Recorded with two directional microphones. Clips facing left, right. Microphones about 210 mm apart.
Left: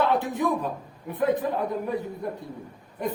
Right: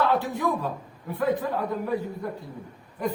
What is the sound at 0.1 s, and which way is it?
A man's voice, 20° left (ahead or behind).